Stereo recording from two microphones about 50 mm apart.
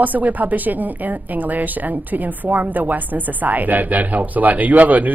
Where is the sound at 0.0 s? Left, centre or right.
Right.